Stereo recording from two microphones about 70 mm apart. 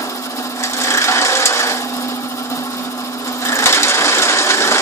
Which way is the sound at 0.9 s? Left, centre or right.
Left.